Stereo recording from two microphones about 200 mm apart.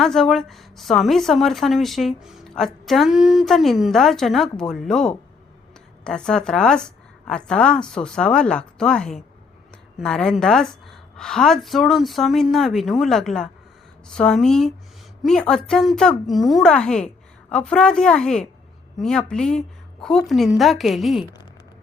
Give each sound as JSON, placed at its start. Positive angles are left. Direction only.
{"t": 0.0, "sound": "speech", "side_deg": 0}